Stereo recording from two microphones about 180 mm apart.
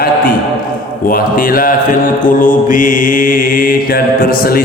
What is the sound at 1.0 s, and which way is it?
Mantra, 55° left (ahead or behind).